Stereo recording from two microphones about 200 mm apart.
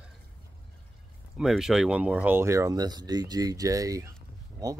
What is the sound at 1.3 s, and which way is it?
Speech, centre (ahead or behind).